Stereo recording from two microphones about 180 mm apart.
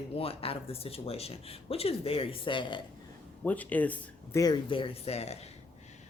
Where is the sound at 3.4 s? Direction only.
10° left (ahead or behind); by 5.5 s 35° left (ahead or behind).